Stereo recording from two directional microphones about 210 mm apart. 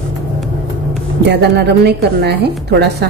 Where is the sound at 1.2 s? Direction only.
55° right (ahead or behind).